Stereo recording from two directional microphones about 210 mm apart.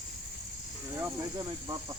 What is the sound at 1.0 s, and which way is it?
Snake, 20° right (ahead or behind).